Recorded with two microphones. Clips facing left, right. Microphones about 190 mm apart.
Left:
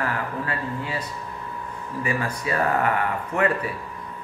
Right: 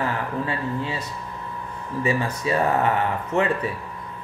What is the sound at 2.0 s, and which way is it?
A man's voice, 25° right (ahead or behind).